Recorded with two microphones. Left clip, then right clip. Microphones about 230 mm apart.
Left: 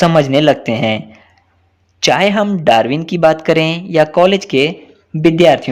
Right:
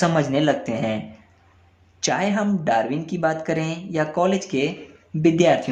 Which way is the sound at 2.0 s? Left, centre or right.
Left.